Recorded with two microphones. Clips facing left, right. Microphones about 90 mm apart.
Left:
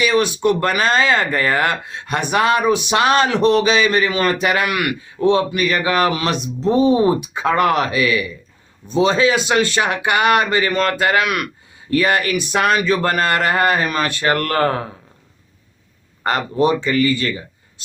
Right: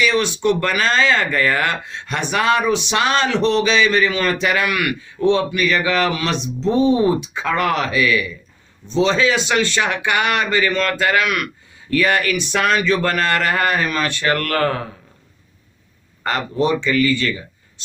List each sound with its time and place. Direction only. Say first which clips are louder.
0.4 s speech: right 1 dB; 25° left (ahead or behind)
0.8 s a man's voice: left 1 dB; 35° left (ahead or behind)
16.2 s speech: left 2 dB; 45° left (ahead or behind)